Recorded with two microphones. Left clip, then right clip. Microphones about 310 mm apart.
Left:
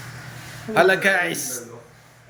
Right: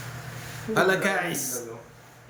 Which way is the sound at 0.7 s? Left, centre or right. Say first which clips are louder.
Left 6 dB; centre.